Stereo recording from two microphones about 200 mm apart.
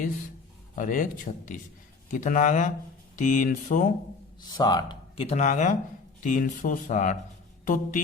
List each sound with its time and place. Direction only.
0.8 s speech: 45° left (ahead or behind)
4.4 s speech: 20° left (ahead or behind); by 8.0 s 40° left (ahead or behind)